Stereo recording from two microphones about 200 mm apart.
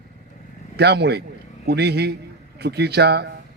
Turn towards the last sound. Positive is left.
turn(degrees=-55)  # may be behind; listen again after turning